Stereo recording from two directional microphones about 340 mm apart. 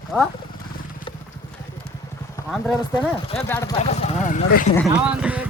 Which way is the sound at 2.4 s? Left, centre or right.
Centre.